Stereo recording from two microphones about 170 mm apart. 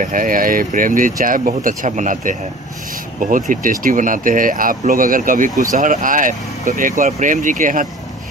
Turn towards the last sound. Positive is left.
turn(degrees=-50)  # may be behind; listen again after turning